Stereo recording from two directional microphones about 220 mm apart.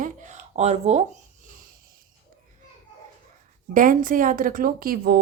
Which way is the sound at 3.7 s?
40° right (ahead or behind).